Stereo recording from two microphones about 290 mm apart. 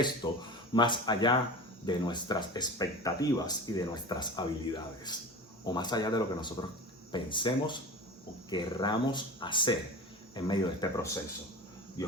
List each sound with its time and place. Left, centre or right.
0.2 s speech: centre